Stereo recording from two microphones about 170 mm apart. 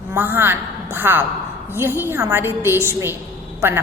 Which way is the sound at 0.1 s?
15° right (ahead or behind).